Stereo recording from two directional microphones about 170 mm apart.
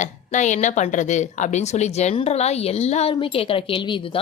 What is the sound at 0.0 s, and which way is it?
Speech, 45° left (ahead or behind).